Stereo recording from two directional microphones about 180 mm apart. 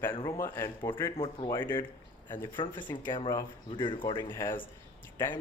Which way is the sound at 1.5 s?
10° left (ahead or behind).